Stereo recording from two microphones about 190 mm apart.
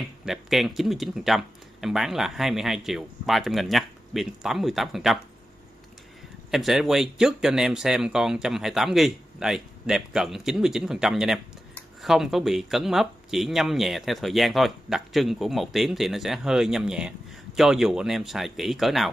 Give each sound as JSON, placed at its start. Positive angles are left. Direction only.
{"t": 0.2, "sound": "speech", "side_deg": 0}
{"t": 6.5, "sound": "speech", "side_deg": 0}